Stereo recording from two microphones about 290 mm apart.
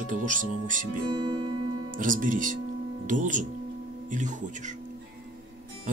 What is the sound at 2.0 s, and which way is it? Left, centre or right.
Speech, right.